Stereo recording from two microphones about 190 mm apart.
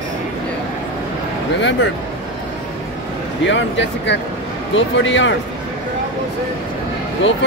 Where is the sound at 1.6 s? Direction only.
70° left (ahead or behind).